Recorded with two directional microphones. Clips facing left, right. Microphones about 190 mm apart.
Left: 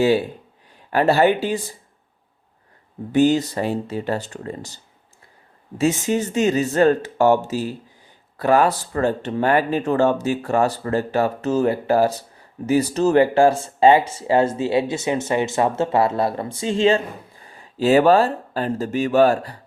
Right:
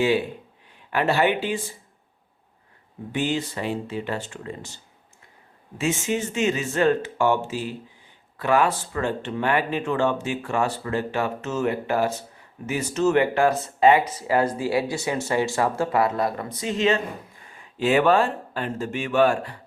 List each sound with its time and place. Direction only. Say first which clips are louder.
0.9 s speech: left 5 dB; 40° left (ahead or behind)
3.1 s speech: left 9 dB; 40° left (ahead or behind)